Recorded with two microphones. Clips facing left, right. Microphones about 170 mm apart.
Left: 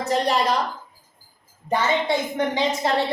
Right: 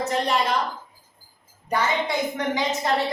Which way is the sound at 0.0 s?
35° left (ahead or behind).